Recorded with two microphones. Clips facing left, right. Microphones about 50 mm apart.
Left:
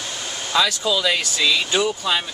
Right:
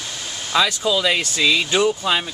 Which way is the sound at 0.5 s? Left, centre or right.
Centre.